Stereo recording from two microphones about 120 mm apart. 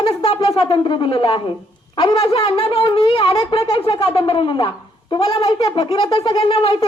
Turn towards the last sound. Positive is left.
turn(degrees=50)  # may be behind; listen again after turning